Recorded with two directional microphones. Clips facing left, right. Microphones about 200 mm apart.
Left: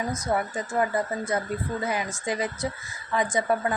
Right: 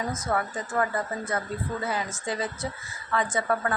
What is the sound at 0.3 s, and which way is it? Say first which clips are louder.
A woman's voice: left 2 dB; 15° left (ahead or behind).